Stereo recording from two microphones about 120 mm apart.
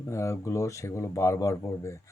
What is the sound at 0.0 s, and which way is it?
Speech, 25° left (ahead or behind).